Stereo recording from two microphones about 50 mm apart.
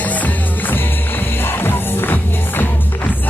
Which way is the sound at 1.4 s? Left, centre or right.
Left.